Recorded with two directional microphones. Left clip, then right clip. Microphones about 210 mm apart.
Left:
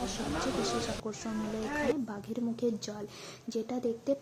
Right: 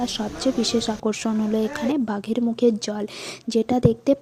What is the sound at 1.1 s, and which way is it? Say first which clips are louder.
A woman's voice: right 13 dB; 45° right (ahead or behind).